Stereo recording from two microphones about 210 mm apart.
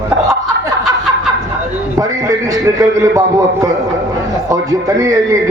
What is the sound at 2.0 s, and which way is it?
A man's voice, 15° right (ahead or behind).